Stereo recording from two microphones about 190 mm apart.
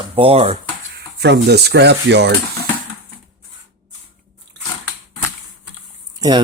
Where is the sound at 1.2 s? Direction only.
60° right (ahead or behind).